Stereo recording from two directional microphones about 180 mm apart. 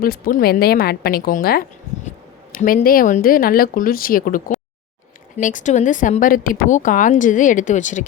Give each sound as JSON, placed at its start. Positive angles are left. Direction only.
{"t": 0.0, "sound": "a woman's voice", "side_deg": 50}